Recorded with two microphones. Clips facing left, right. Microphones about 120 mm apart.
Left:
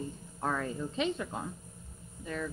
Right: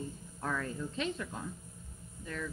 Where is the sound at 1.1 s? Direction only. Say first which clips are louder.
Left 3 dB; 50° left (ahead or behind).